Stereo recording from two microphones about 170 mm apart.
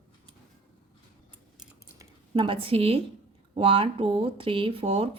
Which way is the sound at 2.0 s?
30° right (ahead or behind).